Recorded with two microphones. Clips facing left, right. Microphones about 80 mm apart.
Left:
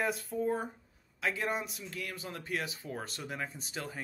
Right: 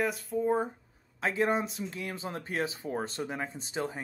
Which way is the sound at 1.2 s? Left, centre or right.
Right.